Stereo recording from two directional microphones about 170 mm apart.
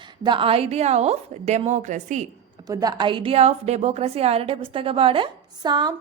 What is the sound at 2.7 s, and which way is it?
A woman's voice, 20° right (ahead or behind).